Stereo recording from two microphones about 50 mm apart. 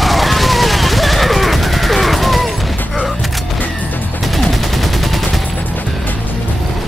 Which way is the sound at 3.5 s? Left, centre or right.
Left.